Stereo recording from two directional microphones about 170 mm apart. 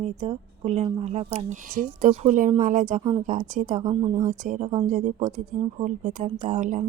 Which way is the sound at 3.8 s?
25° right (ahead or behind).